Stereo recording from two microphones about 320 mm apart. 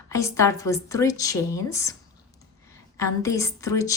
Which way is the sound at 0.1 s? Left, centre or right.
Centre.